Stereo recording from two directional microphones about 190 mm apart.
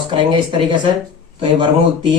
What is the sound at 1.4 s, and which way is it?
Speech, 25° right (ahead or behind).